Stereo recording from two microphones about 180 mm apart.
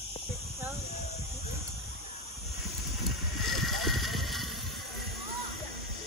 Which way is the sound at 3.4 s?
Centre (ahead or behind).